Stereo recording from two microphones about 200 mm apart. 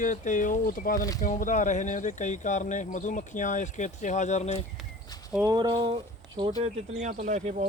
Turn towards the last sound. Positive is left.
turn(degrees=-35)  # may be behind; listen again after turning